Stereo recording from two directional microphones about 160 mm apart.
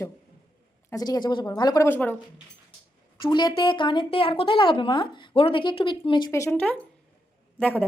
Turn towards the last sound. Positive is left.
turn(degrees=10)  # may be behind; listen again after turning